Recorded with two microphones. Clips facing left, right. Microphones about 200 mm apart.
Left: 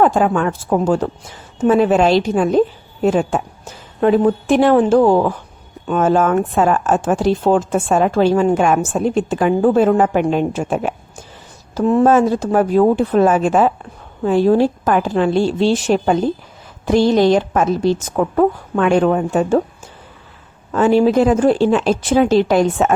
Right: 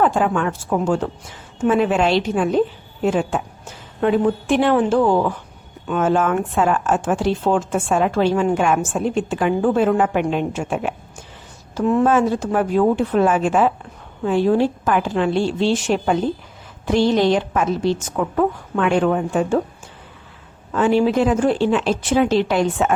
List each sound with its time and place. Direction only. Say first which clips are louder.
0.0 s a woman's voice: left 4 dB; 40° left (ahead or behind)
20.7 s a woman's voice: left 4 dB; 40° left (ahead or behind)